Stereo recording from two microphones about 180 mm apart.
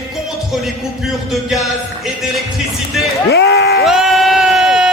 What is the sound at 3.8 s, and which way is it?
Crowd, centre (ahead or behind).